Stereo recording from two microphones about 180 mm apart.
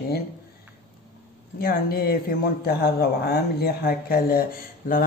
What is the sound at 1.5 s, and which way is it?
A man's voice, 55° left (ahead or behind).